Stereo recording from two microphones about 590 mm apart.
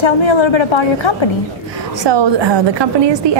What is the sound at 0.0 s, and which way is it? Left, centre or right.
A woman's voice, left.